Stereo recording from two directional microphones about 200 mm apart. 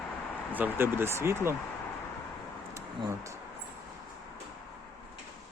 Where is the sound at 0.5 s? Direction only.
10° right (ahead or behind).